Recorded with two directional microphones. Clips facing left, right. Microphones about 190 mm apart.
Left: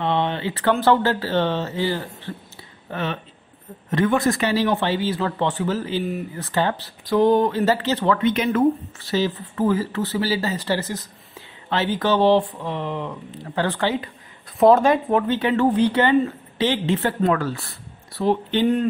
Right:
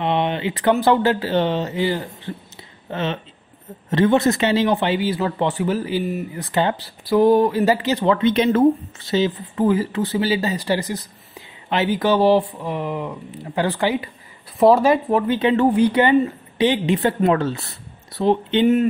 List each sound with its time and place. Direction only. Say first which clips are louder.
0.0 s speech: right 2 dB; 15° right (ahead or behind)
8.2 s speech: right 3 dB; 30° right (ahead or behind)
9.0 s speech: right 3 dB; 20° right (ahead or behind); by 15.3 s 5° right (ahead or behind)
15.3 s speech: right 4 dB; 15° right (ahead or behind)